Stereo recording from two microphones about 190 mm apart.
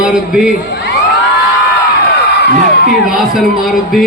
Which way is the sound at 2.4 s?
60° left (ahead or behind).